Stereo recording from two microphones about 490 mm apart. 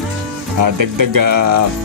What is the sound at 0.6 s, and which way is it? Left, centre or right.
Speech, right.